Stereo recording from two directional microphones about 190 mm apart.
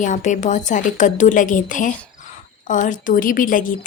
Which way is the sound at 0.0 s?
40° left (ahead or behind).